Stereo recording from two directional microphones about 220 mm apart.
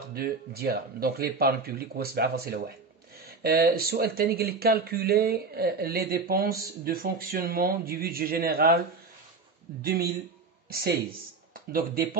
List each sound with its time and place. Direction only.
0.1 s speech: 45° right (ahead or behind)